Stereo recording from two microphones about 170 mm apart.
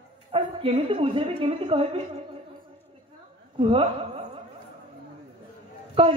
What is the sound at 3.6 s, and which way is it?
Speech, 35° right (ahead or behind).